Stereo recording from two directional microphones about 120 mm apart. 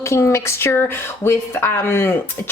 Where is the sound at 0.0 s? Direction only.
25° left (ahead or behind).